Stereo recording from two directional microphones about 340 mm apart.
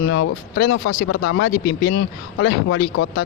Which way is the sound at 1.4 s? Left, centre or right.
Left.